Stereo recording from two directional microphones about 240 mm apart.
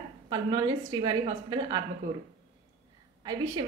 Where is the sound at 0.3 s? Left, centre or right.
Centre.